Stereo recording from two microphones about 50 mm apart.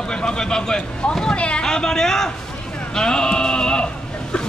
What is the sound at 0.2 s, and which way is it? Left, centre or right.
Speech, centre.